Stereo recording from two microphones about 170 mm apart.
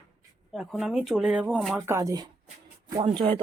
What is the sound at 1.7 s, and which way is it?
Speech, 15° right (ahead or behind).